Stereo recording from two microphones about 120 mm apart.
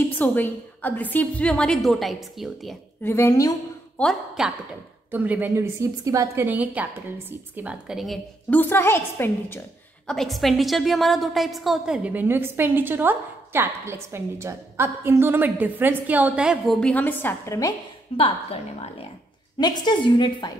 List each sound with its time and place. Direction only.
0.2 s a woman's voice: 15° left (ahead or behind); by 2.7 s centre (ahead or behind)
3.0 s a woman's voice: 20° left (ahead or behind)
4.0 s a woman's voice: 10° left (ahead or behind)
4.4 s speech: 5° right (ahead or behind)
5.1 s a woman's voice: 15° right (ahead or behind)
5.6 s a woman's voice: 25° right (ahead or behind); by 8.2 s 5° right (ahead or behind)
8.5 s a woman's voice: 15° left (ahead or behind)
10.0 s a woman's voice: centre (ahead or behind)
16.8 s a woman's voice: 15° left (ahead or behind)
18.1 s a woman's voice: 50° left (ahead or behind)
19.6 s a woman's voice: 35° left (ahead or behind)